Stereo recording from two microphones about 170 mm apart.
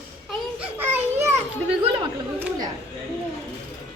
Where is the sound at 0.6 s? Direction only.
10° right (ahead or behind).